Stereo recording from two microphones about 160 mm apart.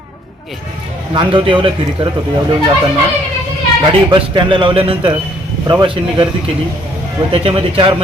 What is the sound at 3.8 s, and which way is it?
A man's voice, 30° right (ahead or behind).